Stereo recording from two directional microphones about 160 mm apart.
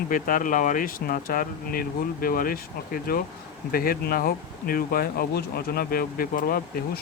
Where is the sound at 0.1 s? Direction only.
60° left (ahead or behind).